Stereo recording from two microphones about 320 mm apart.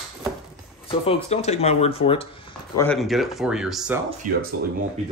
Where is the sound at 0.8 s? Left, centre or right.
Centre.